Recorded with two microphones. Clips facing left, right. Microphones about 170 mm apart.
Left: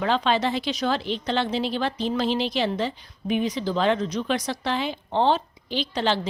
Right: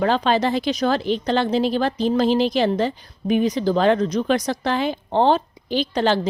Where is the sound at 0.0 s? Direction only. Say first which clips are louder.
Right 4 dB; 40° right (ahead or behind).